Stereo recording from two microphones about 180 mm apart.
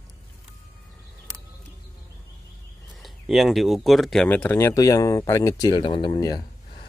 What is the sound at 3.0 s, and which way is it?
Speech, centre (ahead or behind).